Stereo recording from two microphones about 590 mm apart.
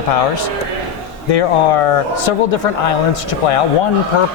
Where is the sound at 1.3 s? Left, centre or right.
Left.